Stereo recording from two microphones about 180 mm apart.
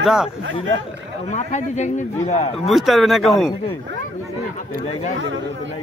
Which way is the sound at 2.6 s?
Centre (ahead or behind).